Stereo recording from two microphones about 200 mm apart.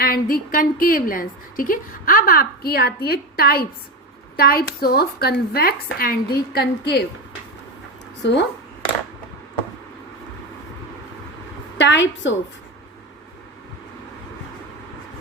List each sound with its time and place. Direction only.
0.0 s a woman's voice: 45° left (ahead or behind)
8.2 s a woman's voice: 60° left (ahead or behind)
11.8 s a woman's voice: 65° left (ahead or behind)